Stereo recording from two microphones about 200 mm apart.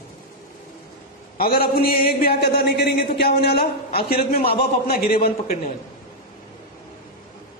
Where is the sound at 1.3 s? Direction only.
45° left (ahead or behind).